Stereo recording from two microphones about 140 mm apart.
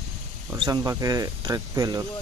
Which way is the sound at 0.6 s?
25° right (ahead or behind).